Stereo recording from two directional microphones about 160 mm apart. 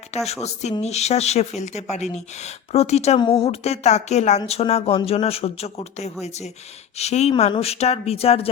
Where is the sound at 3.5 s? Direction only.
40° left (ahead or behind).